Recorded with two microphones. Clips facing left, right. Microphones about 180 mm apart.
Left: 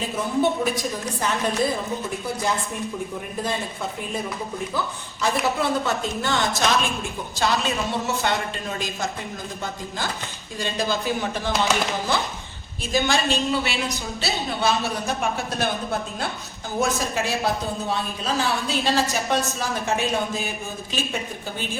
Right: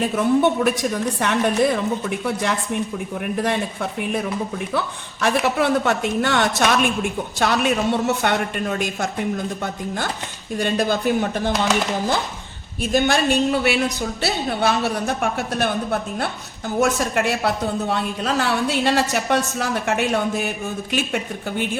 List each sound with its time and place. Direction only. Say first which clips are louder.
0.0 s a woman's voice: right 5 dB; 65° right (ahead or behind)
5.2 s a woman's voice: right 4 dB; 70° right (ahead or behind)
10.6 s a woman's voice: right 5 dB; 60° right (ahead or behind)
12.9 s a woman's voice: right 4 dB; 55° right (ahead or behind)